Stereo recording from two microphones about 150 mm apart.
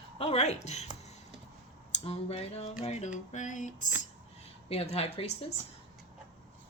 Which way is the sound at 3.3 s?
55° left (ahead or behind).